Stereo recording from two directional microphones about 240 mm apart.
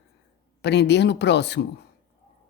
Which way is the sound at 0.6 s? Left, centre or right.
Left.